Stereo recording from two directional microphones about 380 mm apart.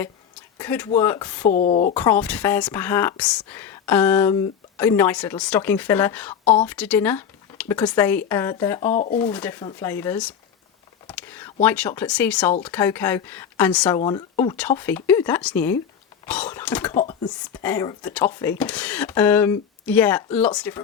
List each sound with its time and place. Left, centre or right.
0.6 s a woman's voice: centre
1.5 s a woman's voice: centre
2.0 s a woman's voice: centre
8.9 s a woman's voice: centre
9.1 s a woman's voice: centre